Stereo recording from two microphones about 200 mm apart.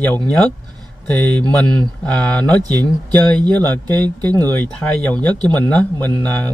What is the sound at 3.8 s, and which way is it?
Speech, 20° right (ahead or behind).